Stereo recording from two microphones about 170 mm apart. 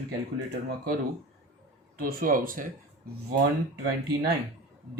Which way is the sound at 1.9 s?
55° right (ahead or behind).